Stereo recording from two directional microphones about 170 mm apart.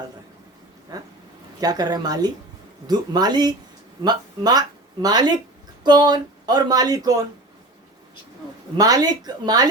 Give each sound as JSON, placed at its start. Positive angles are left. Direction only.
{"t": 0.9, "sound": "speech", "side_deg": -25}
{"t": 8.8, "sound": "speech", "side_deg": -25}